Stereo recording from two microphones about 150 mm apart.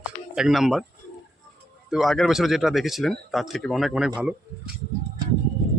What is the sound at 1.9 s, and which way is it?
Speech, centre (ahead or behind).